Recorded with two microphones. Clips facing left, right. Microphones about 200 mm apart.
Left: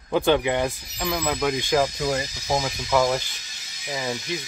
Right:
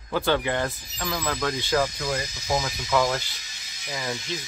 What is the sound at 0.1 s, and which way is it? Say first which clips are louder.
Speech: left 4 dB; 15° left (ahead or behind).